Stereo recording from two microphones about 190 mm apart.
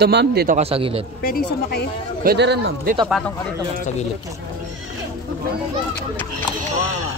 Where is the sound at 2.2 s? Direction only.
60° right (ahead or behind).